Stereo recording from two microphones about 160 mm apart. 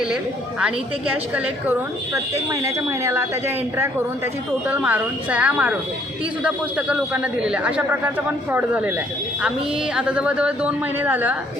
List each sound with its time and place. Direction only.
0.6 s a man's voice: 5° right (ahead or behind)
2.6 s a man's voice: 15° right (ahead or behind)
4.7 s a man's voice: 10° right (ahead or behind)
9.9 s a man's voice: 5° right (ahead or behind)